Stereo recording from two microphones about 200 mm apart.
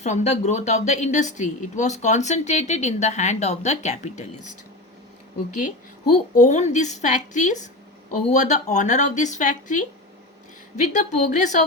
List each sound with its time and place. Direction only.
0.0 s a woman's voice: 35° left (ahead or behind)
6.3 s a woman's voice: 35° left (ahead or behind)